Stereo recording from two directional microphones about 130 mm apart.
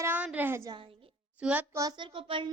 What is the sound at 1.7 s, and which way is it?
Hands, 30° right (ahead or behind).